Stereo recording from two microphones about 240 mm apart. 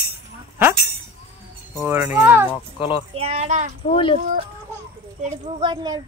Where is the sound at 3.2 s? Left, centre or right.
Right.